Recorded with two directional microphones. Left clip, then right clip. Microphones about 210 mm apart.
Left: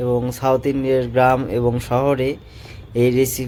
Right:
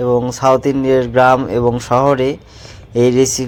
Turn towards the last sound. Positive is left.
turn(degrees=-10)  # may be behind; listen again after turning